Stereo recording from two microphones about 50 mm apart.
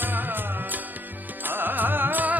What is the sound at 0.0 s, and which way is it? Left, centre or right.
Music, right.